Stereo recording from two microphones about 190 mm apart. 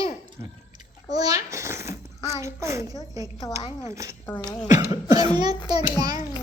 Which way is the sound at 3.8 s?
15° right (ahead or behind).